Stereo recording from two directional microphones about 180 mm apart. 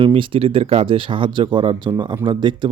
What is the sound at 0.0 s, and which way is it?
Speech, 30° right (ahead or behind).